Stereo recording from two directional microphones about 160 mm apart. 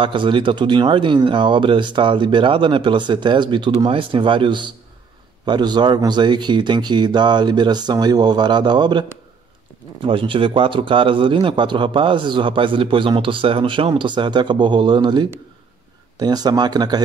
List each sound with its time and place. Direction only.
0.0 s a man's voice: 30° right (ahead or behind)
10.0 s a man's voice: 30° right (ahead or behind)